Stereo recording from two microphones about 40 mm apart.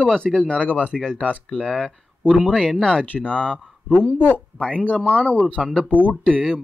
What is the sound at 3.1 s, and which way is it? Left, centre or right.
Speech, left.